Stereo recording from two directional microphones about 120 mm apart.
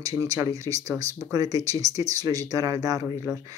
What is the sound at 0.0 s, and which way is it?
Speech, 30° right (ahead or behind).